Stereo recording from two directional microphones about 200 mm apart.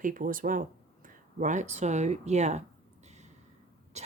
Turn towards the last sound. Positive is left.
turn(degrees=-35)  # may be behind; listen again after turning